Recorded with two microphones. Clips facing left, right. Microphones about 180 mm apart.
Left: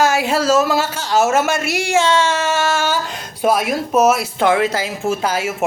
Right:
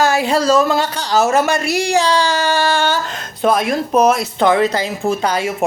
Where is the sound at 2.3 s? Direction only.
35° right (ahead or behind).